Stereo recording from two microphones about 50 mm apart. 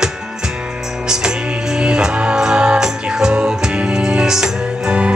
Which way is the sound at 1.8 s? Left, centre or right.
Centre.